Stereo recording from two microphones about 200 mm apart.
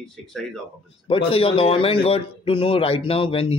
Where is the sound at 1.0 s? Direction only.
25° left (ahead or behind).